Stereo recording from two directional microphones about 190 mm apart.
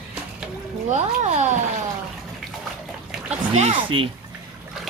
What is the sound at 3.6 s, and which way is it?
Speech, 30° right (ahead or behind).